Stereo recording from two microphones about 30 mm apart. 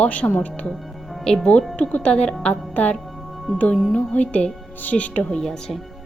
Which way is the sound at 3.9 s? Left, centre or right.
Left.